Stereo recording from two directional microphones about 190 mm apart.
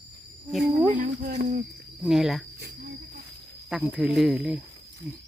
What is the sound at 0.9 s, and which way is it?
Speech, 50° right (ahead or behind).